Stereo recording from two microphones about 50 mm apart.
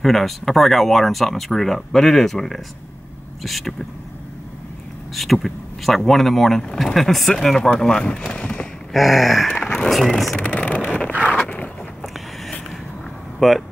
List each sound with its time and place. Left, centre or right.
0.0 s speech: centre
5.1 s speech: centre
8.3 s a sound: left
8.9 s speech: centre
10.4 s vehicle: left
11.2 s a sound: left
13.4 s speech: centre